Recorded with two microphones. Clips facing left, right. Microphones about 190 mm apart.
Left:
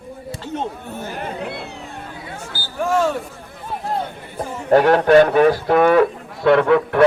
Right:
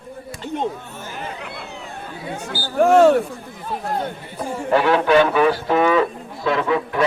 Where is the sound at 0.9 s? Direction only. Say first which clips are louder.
Left 4 dB; 60° left (ahead or behind).